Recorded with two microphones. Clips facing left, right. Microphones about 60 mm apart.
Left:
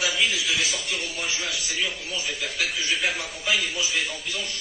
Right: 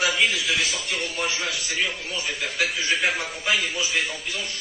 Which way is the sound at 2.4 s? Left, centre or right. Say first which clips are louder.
Right 4 dB; right.